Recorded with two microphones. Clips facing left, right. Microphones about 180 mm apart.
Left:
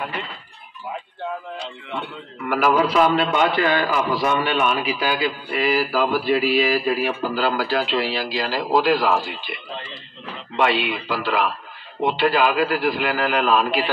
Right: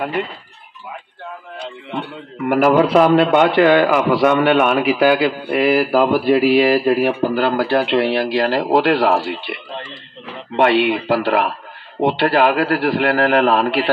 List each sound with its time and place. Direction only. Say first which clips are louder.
0.0 s speech: right 8 dB; 50° right (ahead or behind)
1.6 s a man's voice: right 4 dB; 55° right (ahead or behind)